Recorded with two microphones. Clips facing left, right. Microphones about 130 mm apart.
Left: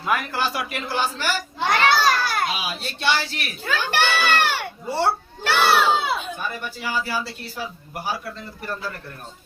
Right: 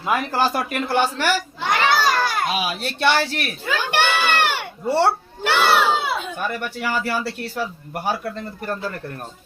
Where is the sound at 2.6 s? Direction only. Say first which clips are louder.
Right 6 dB; 55° right (ahead or behind).